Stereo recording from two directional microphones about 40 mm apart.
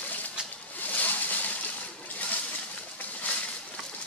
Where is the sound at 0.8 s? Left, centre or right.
Left.